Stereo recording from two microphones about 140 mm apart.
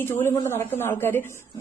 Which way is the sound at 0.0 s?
15° left (ahead or behind).